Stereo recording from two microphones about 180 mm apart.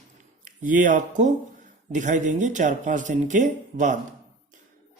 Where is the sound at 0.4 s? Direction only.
45° right (ahead or behind).